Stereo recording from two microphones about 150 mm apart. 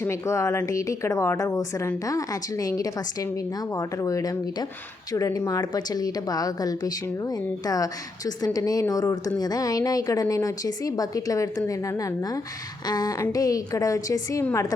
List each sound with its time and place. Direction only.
0.0 s a woman's voice: 20° left (ahead or behind)
8.4 s a woman's voice: 25° left (ahead or behind)